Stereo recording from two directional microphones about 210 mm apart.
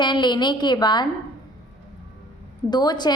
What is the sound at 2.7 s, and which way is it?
Speech, 20° left (ahead or behind).